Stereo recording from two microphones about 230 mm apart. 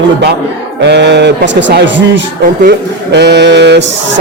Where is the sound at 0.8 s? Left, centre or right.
Right.